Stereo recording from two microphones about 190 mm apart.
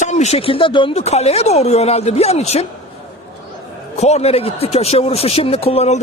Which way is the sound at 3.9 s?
35° left (ahead or behind).